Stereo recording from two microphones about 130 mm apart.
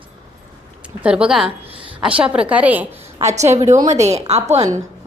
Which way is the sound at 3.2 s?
60° right (ahead or behind).